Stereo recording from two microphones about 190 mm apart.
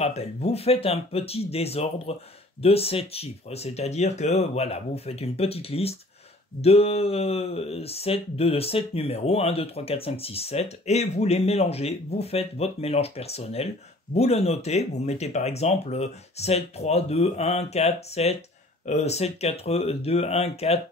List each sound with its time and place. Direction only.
0.0 s speech: 35° left (ahead or behind)